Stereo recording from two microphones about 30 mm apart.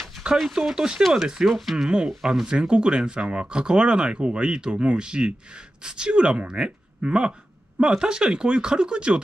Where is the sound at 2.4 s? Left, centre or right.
Right.